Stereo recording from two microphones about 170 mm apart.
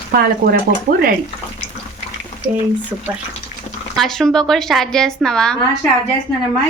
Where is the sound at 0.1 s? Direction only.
65° right (ahead or behind).